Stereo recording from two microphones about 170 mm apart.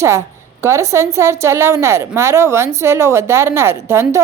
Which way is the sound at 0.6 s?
15° right (ahead or behind).